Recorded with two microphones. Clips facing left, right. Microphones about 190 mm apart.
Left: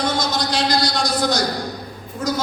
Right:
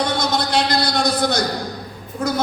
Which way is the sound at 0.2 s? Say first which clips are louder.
Right 2 dB; 60° right (ahead or behind).